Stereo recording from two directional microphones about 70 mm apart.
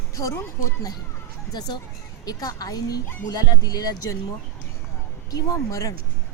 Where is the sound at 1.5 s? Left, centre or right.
Left.